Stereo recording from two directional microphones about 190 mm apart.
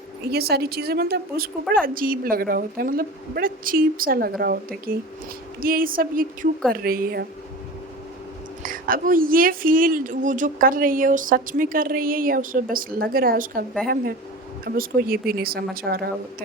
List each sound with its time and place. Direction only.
0.3 s a woman's voice: 55° right (ahead or behind)
8.6 s speech: 45° right (ahead or behind)